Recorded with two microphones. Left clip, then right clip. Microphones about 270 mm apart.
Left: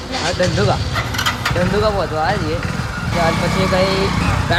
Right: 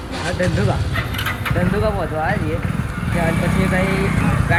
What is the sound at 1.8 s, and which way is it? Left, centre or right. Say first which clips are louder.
Speech: left 3 dB; centre.